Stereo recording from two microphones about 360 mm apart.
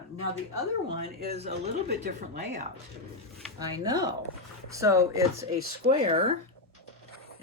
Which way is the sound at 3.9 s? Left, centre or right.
Centre.